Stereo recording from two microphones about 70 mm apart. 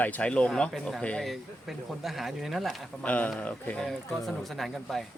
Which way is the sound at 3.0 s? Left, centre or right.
Left.